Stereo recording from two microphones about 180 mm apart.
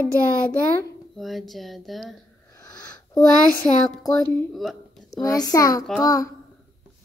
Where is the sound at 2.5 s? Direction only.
20° left (ahead or behind).